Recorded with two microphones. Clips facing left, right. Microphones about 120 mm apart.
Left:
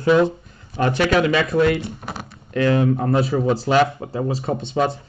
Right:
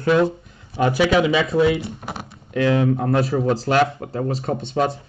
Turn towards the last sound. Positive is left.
turn(degrees=0)  # may be behind; listen again after turning